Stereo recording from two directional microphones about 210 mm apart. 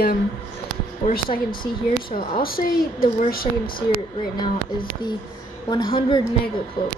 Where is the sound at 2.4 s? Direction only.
45° left (ahead or behind).